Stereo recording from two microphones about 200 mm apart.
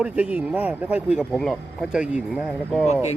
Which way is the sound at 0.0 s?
5° right (ahead or behind).